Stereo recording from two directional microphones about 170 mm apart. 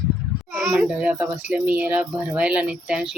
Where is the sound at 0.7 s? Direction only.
5° right (ahead or behind).